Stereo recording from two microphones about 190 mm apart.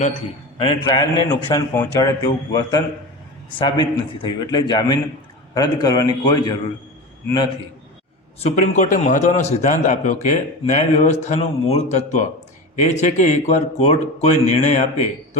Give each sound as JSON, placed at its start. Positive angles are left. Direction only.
{"t": 0.6, "sound": "a man's voice", "side_deg": 25}
{"t": 1.3, "sound": "a man's voice", "side_deg": 10}
{"t": 8.4, "sound": "a man's voice", "side_deg": 35}